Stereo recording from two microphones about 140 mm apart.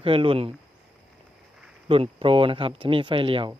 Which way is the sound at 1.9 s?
40° right (ahead or behind).